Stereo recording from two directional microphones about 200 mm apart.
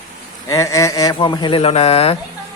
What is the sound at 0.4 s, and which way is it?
Speech, 15° left (ahead or behind).